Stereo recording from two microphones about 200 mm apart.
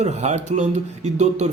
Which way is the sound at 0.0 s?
35° right (ahead or behind).